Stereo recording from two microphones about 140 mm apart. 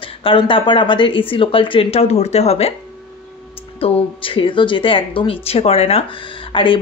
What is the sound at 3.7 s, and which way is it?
Speech, 40° left (ahead or behind).